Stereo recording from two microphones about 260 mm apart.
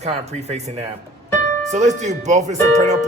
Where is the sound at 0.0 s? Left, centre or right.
Right.